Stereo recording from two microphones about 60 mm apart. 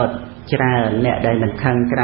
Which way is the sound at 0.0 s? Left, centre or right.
Centre.